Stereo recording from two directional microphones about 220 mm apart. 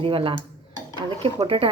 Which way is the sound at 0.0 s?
25° right (ahead or behind).